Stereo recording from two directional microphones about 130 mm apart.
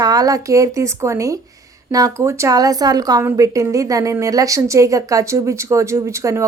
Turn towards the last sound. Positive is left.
turn(degrees=-20)  # may be behind; listen again after turning